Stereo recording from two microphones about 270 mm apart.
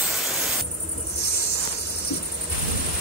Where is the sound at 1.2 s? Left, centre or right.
Left.